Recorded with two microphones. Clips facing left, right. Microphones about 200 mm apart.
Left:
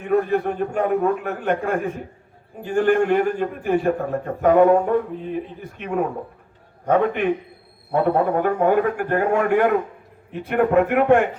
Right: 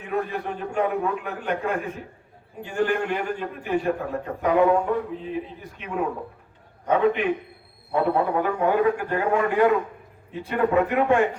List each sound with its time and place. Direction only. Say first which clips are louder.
0.0 s a man's voice: left 8 dB; 50° left (ahead or behind)